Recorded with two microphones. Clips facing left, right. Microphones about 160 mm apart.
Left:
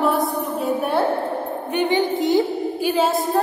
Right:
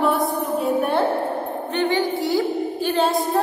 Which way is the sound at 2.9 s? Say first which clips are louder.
Even; 5° left (ahead or behind).